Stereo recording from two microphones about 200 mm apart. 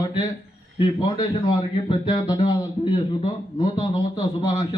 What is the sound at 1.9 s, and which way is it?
A man's voice, 25° left (ahead or behind).